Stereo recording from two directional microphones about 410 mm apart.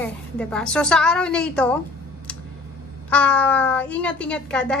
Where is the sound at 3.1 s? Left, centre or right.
Centre.